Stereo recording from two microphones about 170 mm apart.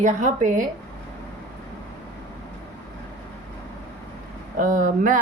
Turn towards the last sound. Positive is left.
turn(degrees=-50)  # may be behind; listen again after turning